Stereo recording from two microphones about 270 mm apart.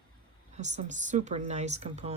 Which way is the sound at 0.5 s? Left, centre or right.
Right.